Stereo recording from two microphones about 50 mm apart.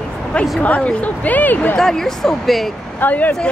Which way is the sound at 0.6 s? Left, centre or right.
Left.